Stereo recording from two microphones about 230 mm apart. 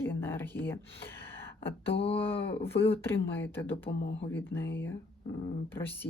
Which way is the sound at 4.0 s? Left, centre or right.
Left.